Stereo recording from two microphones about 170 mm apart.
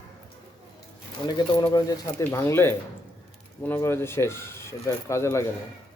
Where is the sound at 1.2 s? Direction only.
25° left (ahead or behind).